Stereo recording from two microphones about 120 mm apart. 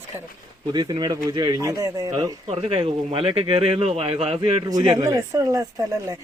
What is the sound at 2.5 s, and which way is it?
Speech, 55° right (ahead or behind).